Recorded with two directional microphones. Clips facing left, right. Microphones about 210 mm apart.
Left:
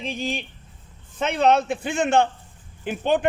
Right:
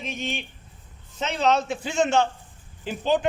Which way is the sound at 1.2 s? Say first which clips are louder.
Left 3 dB; 55° left (ahead or behind).